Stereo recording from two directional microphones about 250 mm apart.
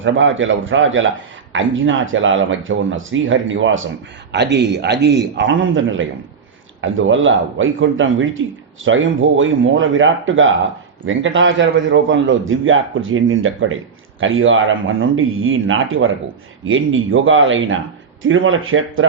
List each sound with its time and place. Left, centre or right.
0.0 s a man's voice: right